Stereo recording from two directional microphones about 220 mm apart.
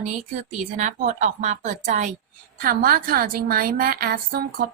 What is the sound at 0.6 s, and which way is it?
A woman's voice, 35° right (ahead or behind).